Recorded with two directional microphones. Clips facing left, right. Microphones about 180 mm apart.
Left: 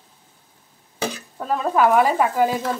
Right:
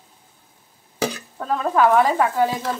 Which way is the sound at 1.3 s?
10° left (ahead or behind).